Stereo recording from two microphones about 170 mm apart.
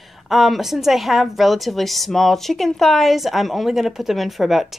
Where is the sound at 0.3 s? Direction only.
Centre (ahead or behind).